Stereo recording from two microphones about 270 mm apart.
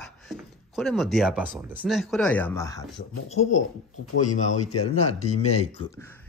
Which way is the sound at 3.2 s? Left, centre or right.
Left.